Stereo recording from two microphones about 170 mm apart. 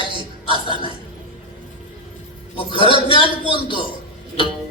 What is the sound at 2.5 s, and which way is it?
Speech, 30° left (ahead or behind).